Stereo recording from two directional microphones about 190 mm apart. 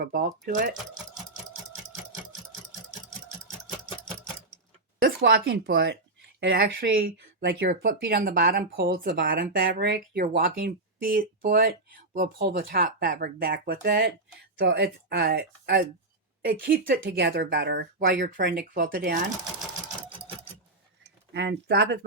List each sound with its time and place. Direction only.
0.0 s speech: 45° right (ahead or behind)
4.9 s speech: 50° right (ahead or behind)
21.3 s speech: 60° right (ahead or behind)